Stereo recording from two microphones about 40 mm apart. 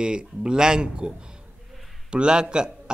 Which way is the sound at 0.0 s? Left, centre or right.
Right.